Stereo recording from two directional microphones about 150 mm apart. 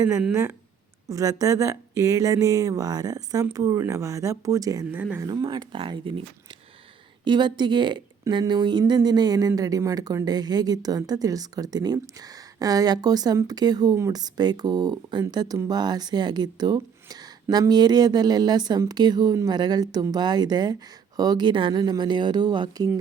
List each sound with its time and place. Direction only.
0.2 s speech: 10° right (ahead or behind)
1.0 s speech: 25° right (ahead or behind)
4.9 s speech: 10° right (ahead or behind)
5.2 s speech: 30° right (ahead or behind)